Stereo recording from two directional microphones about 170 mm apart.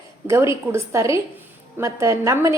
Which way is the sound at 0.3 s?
15° right (ahead or behind).